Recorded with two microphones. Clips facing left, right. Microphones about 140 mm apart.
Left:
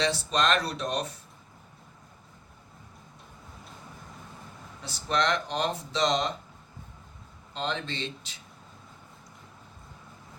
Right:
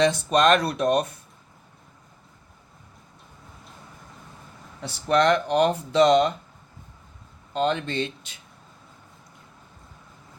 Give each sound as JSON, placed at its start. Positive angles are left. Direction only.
{"t": 0.0, "sound": "speech", "side_deg": -55}
{"t": 4.8, "sound": "speech", "side_deg": -60}
{"t": 7.5, "sound": "speech", "side_deg": -60}